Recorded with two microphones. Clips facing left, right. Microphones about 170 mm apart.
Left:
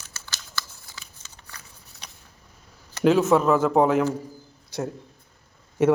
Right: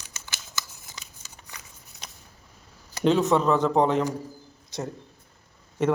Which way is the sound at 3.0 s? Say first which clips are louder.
Left 3 dB; 5° left (ahead or behind).